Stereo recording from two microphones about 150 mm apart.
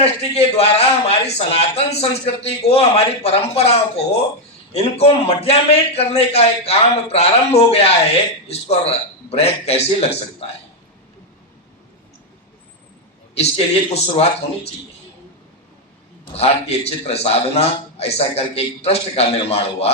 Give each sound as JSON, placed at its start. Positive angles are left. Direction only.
{"t": 0.0, "sound": "a man's voice", "side_deg": 45}
{"t": 13.9, "sound": "a man's voice", "side_deg": 40}
{"t": 16.2, "sound": "a man's voice", "side_deg": 40}